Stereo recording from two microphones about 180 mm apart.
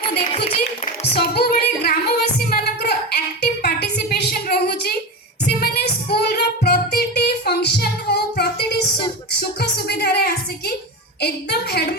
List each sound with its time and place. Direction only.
1.2 s singing: 60° left (ahead or behind)
5.5 s music: 60° left (ahead or behind)
11.2 s a sound: 65° left (ahead or behind)